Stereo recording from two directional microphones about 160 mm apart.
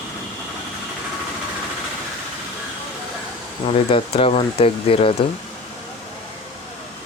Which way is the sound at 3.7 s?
35° left (ahead or behind).